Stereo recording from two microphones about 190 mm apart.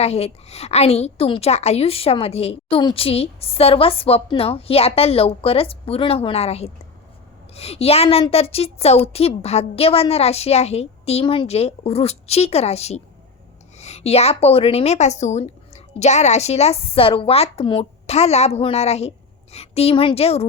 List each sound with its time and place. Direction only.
0.0 s a woman's voice: 35° left (ahead or behind)